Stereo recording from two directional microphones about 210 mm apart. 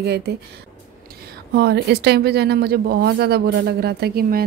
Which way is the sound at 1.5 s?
50° right (ahead or behind).